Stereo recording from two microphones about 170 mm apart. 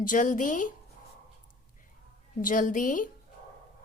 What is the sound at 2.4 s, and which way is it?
Speech, 50° left (ahead or behind).